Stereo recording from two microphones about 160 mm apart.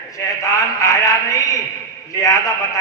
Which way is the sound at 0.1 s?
20° left (ahead or behind).